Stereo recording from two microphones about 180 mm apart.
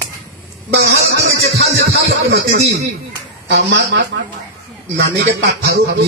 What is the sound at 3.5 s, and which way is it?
Speech, 70° right (ahead or behind).